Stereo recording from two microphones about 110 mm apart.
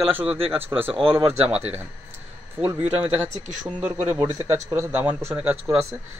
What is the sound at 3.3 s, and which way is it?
Speech, 90° right.